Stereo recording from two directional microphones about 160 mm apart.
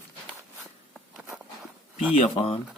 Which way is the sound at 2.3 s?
35° left (ahead or behind).